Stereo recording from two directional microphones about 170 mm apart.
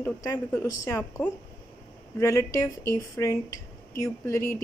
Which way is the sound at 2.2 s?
15° left (ahead or behind).